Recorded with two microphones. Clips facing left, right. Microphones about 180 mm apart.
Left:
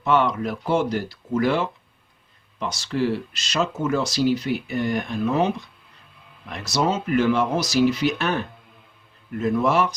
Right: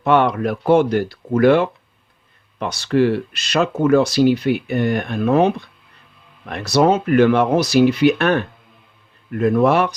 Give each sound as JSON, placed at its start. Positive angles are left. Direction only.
{"t": 0.0, "sound": "speech", "side_deg": -60}